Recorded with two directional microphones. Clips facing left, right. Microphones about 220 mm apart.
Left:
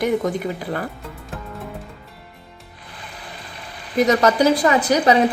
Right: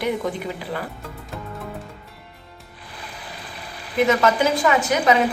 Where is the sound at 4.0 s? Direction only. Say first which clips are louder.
Left 2 dB; 40° left (ahead or behind).